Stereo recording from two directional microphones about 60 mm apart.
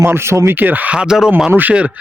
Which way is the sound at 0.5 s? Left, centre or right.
Right.